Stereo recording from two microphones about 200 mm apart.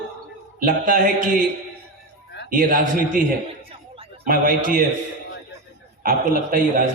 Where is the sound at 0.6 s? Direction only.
45° right (ahead or behind).